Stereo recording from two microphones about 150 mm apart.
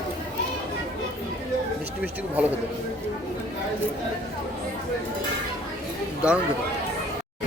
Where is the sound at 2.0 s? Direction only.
10° right (ahead or behind).